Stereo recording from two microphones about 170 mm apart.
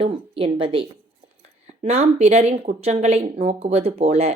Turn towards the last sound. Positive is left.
turn(degrees=-35)  # may be behind; listen again after turning